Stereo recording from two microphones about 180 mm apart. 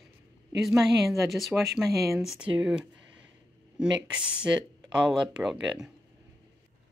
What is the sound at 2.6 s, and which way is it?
Speech, 5° right (ahead or behind).